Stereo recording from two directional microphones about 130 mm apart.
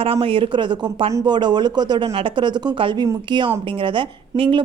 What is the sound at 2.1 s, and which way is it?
A woman's voice, 45° right (ahead or behind).